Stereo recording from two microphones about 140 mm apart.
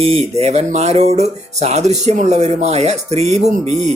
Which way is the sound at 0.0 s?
45° right (ahead or behind).